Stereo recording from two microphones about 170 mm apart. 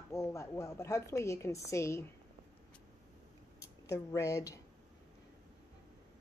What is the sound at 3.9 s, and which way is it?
Speech, 20° left (ahead or behind).